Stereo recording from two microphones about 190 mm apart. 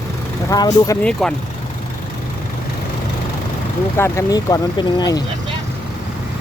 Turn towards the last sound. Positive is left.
turn(degrees=20)  # may be behind; listen again after turning